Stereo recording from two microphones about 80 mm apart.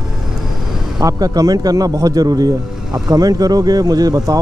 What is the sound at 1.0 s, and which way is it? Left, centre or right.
Speech, right.